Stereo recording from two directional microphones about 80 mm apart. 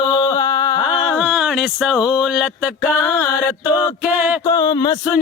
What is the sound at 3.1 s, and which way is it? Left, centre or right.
Mantra, left.